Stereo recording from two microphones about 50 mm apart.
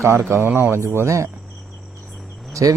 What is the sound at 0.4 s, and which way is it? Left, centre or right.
Speech, right.